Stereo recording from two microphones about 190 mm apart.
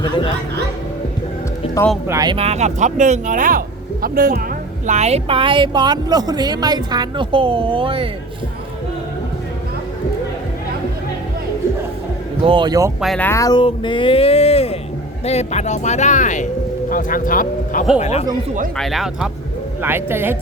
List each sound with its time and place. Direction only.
0.0 s speech: 25° left (ahead or behind)
2.0 s speech: 20° right (ahead or behind); by 4.4 s 50° right (ahead or behind)
4.9 s speech: 35° right (ahead or behind)
12.5 s speech: 25° right (ahead or behind)
13.0 s speech: 5° left (ahead or behind); by 17.8 s 45° left (ahead or behind)
18.0 s speech: 35° left (ahead or behind)
18.8 s speech: centre (ahead or behind)